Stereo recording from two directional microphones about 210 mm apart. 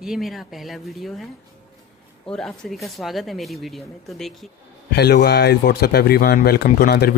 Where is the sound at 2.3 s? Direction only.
Centre (ahead or behind).